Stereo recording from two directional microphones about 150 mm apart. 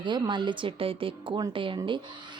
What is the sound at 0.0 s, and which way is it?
Speech, 30° right (ahead or behind).